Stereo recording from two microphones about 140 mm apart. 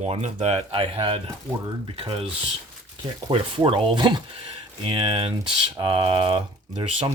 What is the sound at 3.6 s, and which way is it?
Speech, 40° right (ahead or behind).